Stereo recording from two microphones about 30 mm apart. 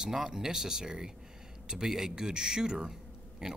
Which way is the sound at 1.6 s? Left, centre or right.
Right.